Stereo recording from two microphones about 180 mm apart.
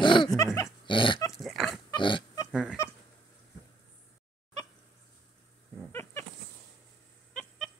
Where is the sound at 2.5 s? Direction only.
5° right (ahead or behind).